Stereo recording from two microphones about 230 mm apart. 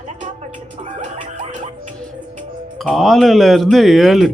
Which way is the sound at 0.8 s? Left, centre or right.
Right.